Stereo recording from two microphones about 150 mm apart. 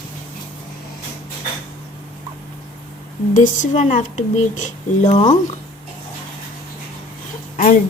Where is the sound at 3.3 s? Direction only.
55° left (ahead or behind).